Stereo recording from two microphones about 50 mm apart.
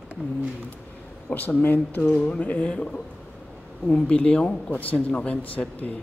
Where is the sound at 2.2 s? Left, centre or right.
Left.